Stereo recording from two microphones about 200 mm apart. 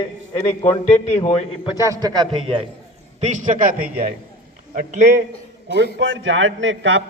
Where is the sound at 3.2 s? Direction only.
40° right (ahead or behind).